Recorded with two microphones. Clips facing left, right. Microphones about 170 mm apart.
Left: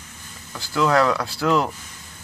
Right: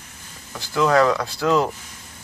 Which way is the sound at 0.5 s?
Centre (ahead or behind).